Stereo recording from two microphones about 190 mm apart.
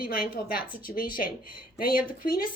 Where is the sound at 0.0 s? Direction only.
50° left (ahead or behind).